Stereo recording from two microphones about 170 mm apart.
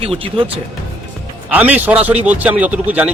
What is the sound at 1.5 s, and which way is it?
Speech, 10° right (ahead or behind).